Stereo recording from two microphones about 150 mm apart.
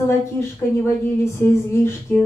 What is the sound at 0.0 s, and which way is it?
A woman's voice, 20° left (ahead or behind).